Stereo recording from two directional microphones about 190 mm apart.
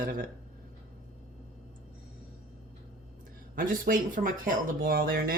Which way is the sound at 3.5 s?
45° right (ahead or behind).